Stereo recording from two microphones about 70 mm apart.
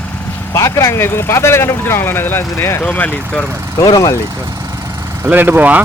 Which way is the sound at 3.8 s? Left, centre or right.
Left.